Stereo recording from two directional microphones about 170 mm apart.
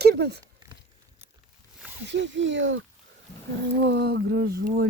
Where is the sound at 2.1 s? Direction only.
90° right.